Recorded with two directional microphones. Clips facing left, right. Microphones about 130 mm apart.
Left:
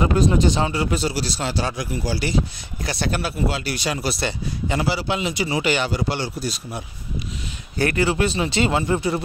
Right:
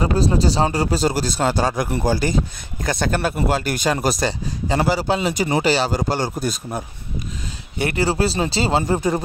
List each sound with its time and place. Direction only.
0.0 s speech: 35° right (ahead or behind)
1.9 s speech: 60° right (ahead or behind)
2.1 s speech: 45° right (ahead or behind)
7.7 s speech: 25° right (ahead or behind)
8.0 s speech: 35° right (ahead or behind)